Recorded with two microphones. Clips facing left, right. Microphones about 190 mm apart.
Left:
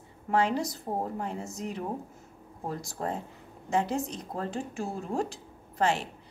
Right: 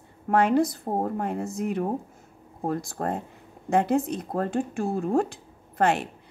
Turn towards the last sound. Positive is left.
turn(degrees=-55)  # may be behind; listen again after turning